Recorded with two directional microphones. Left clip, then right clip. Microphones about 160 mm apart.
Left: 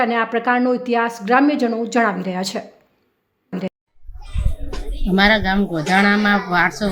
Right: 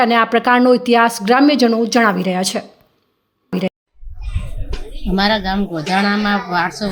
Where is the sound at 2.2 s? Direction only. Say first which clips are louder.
Right 5 dB; 10° right (ahead or behind).